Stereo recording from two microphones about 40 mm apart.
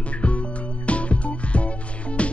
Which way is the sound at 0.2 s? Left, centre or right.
Left.